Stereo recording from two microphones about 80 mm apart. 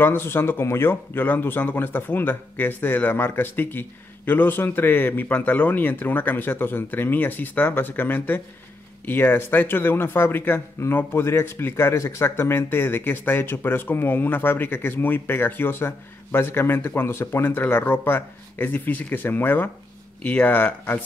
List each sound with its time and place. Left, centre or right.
0.0 s speech: left